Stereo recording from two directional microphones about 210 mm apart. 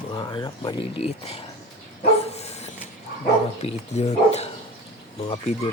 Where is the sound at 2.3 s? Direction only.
30° left (ahead or behind).